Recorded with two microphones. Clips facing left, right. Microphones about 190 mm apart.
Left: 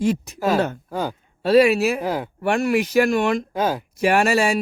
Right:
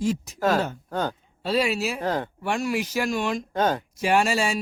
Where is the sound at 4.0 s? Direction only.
60° left (ahead or behind).